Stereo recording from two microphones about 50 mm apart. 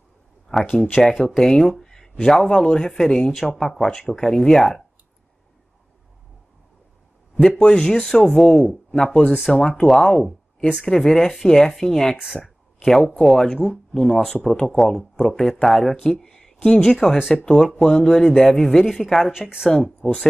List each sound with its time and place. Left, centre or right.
0.5 s speech: centre
0.9 s speech: centre
7.4 s speech: centre
12.7 s a sound: centre
13.2 s speech: centre